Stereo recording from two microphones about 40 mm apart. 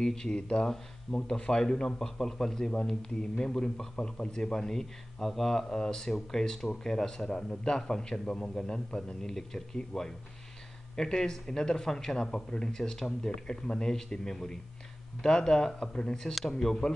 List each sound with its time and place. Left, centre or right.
0.0 s a man's voice: centre